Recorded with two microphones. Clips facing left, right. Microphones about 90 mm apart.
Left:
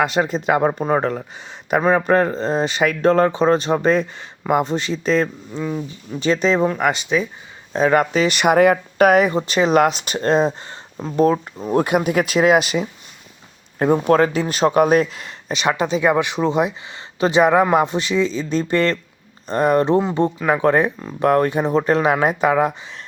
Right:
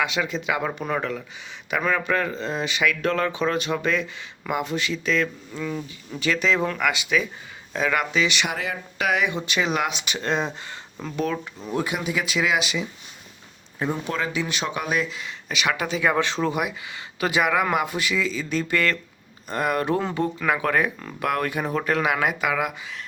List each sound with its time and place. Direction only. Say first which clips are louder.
0.0 s speech: left 7 dB; 40° left (ahead or behind)